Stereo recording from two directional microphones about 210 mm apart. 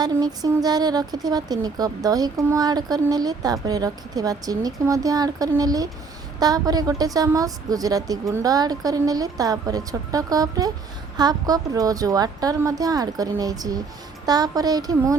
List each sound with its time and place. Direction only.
0.0 s speech: 20° right (ahead or behind)